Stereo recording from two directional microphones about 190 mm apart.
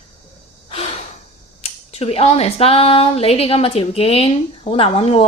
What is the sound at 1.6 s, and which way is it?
Speech, 30° left (ahead or behind).